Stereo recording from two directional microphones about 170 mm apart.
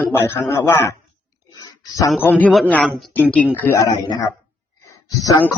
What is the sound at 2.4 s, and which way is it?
A woman's voice, 5° left (ahead or behind).